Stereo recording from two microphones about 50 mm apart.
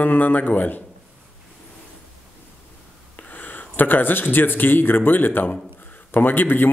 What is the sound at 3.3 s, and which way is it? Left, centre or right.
Speech, left.